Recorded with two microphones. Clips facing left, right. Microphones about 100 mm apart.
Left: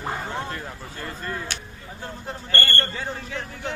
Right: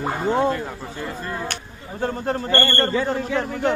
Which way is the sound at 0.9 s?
10° right (ahead or behind).